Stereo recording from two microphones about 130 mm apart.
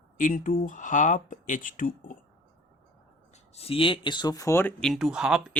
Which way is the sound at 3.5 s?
50° left (ahead or behind).